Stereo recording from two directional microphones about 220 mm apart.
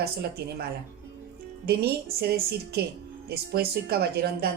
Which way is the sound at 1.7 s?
45° right (ahead or behind).